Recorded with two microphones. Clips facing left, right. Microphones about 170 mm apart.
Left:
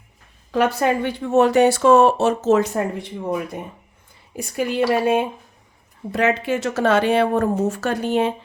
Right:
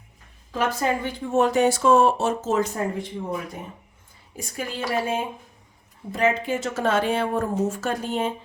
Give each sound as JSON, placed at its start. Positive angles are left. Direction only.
{"t": 0.5, "sound": "speech", "side_deg": 70}
{"t": 4.4, "sound": "speech", "side_deg": 65}